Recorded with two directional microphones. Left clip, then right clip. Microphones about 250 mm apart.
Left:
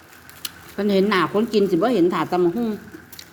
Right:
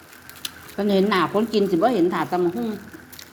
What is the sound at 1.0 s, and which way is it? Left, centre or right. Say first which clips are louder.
A woman's voice: left 1 dB; centre.